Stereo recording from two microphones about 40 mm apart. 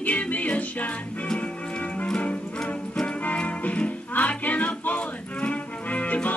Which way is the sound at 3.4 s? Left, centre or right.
Left.